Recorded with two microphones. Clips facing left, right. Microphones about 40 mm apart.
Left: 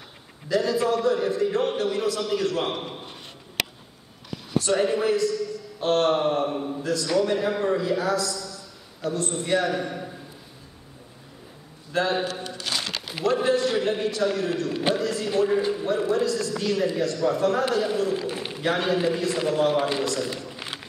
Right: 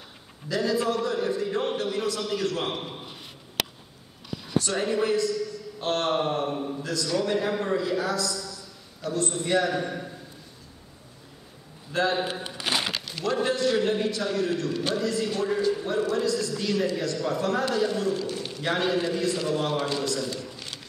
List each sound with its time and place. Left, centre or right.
0.5 s a man's voice: centre
4.6 s a man's voice: centre
11.9 s a man's voice: centre
12.4 s a sound: right
13.0 s a sound: centre
13.4 s speech: centre
14.7 s a man's voice: left
15.0 s speech: centre
15.3 s a man's voice: left
16.2 s speech: centre
18.2 s a sound: left
18.6 s speech: centre
19.7 s a man's voice: left